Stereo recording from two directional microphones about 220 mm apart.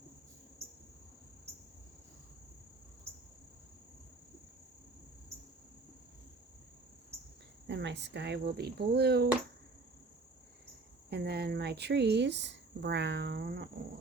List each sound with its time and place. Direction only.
7.7 s a woman's voice: 50° right (ahead or behind)
11.1 s a woman's voice: 45° right (ahead or behind)